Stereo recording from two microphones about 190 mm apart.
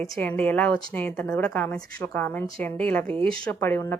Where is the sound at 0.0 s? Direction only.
5° left (ahead or behind).